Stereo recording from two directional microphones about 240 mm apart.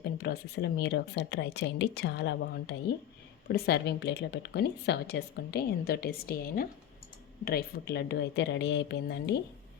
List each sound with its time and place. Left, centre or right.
0.0 s speech: left